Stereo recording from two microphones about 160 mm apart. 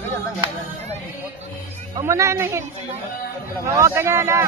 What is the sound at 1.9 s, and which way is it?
Speech, 20° right (ahead or behind).